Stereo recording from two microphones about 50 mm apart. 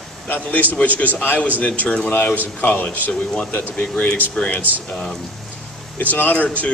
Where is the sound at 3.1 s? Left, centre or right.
Left.